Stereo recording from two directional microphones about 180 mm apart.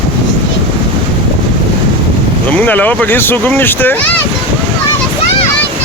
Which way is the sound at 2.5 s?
10° left (ahead or behind).